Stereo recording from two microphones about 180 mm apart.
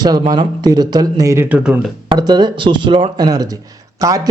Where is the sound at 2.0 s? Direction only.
20° right (ahead or behind).